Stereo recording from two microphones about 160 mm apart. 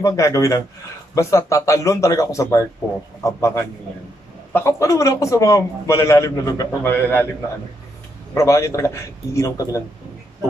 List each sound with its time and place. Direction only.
0.0 s a man's voice: 20° left (ahead or behind)
8.4 s a man's voice: 20° left (ahead or behind)